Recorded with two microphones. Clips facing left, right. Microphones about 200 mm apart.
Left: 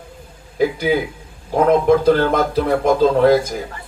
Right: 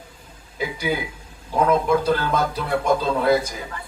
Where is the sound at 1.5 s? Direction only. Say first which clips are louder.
Left 6 dB; 50° left (ahead or behind).